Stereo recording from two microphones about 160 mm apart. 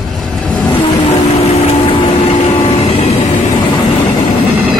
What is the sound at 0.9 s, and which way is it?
Vehicle, 40° left (ahead or behind).